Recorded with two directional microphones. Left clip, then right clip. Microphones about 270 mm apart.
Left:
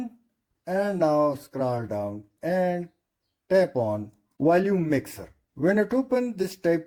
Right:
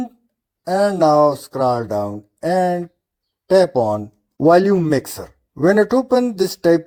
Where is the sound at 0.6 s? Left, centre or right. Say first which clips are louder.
Right 9 dB; right.